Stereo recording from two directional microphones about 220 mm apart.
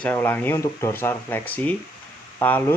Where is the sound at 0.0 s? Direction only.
10° left (ahead or behind).